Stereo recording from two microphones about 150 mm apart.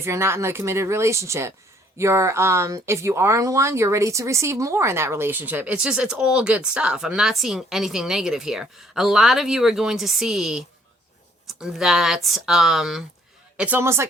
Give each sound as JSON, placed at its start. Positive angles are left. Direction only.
{"t": 0.0, "sound": "a woman's voice", "side_deg": -15}